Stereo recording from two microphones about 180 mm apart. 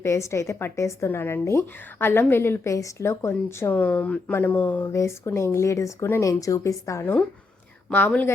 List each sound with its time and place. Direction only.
0.0 s a woman's voice: 15° left (ahead or behind)